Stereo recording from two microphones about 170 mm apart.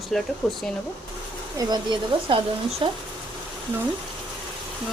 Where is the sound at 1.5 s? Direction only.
25° right (ahead or behind).